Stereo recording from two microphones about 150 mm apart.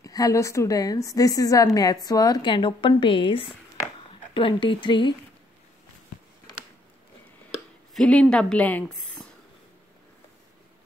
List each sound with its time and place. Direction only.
0.0 s a woman's voice: 25° left (ahead or behind)
7.9 s speech: 5° left (ahead or behind)